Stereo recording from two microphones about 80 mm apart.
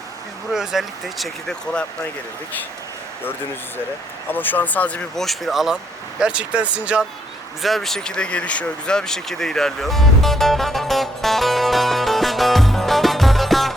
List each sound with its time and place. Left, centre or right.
0.5 s speech: centre
4.3 s speech: left
5.1 s speech: centre
7.6 s a sound: centre